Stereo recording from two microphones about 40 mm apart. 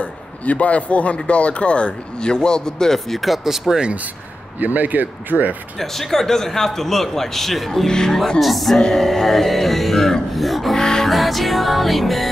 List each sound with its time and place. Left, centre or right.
0.0 s speech: left; by 3.3 s centre
3.4 s speech: centre
4.6 s speech: right
5.8 s a man's voice: centre
7.9 s a man's voice: centre
8.4 s speech: centre
10.8 s music: centre
11.1 s speech: centre